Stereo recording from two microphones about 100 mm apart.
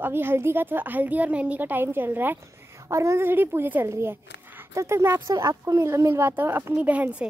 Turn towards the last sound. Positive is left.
turn(degrees=-15)  # may be behind; listen again after turning